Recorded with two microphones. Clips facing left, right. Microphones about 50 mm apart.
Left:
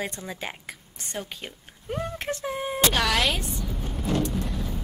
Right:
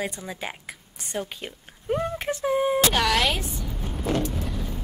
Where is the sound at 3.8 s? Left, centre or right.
Centre.